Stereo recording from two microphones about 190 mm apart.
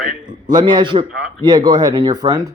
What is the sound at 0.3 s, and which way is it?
A man's voice, 25° right (ahead or behind).